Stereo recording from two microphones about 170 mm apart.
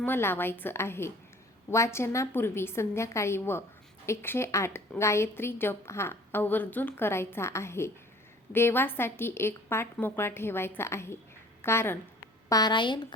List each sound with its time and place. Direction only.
0.0 s a woman's voice: 15° left (ahead or behind)